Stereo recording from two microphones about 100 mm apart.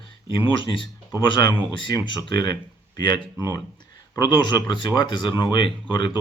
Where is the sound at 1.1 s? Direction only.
45° left (ahead or behind).